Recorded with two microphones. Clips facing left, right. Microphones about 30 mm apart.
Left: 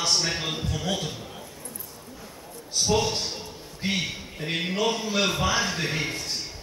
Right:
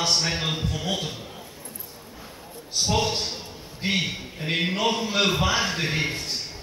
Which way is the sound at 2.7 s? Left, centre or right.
Centre.